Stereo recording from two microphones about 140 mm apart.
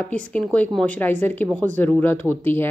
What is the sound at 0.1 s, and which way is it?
Speech, 10° left (ahead or behind).